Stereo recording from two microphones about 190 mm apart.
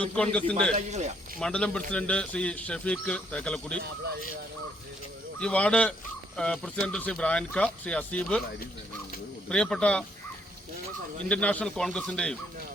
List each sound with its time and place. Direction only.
0.0 s a man's voice: 5° left (ahead or behind)
0.7 s speech: 35° right (ahead or behind)
1.4 s speech: 5° left (ahead or behind)
5.4 s speech: 5° left (ahead or behind)
9.5 s speech: 5° left (ahead or behind)
11.3 s speech: 5° left (ahead or behind)